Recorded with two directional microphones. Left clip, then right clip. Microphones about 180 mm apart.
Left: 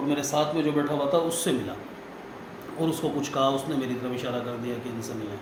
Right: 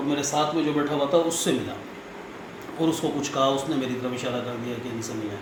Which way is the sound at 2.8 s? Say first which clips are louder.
Right 2 dB; centre (ahead or behind).